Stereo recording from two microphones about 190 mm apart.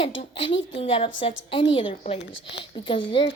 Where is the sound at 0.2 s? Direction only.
25° left (ahead or behind).